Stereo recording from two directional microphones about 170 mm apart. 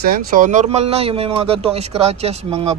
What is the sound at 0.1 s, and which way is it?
Speech, 55° right (ahead or behind).